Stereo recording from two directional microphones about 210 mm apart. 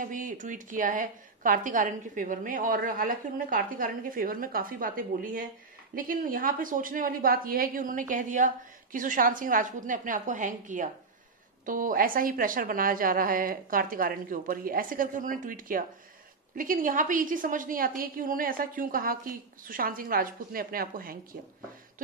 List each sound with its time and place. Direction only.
0.0 s a woman's voice: 40° right (ahead or behind)